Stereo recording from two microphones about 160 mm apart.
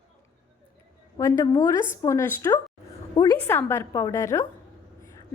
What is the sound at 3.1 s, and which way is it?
Speech, 25° left (ahead or behind).